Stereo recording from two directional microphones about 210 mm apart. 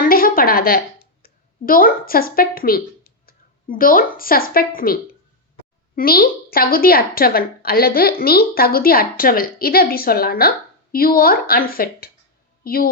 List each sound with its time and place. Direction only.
0.0 s a sound: 45° left (ahead or behind)
1.2 s a woman's voice: 40° left (ahead or behind)
6.0 s a woman's voice: 45° left (ahead or behind)